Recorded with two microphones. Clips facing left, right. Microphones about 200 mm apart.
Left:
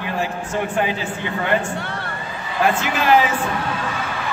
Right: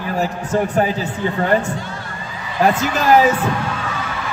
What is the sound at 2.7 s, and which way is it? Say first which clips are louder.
Speech: right 2 dB; 40° right (ahead or behind).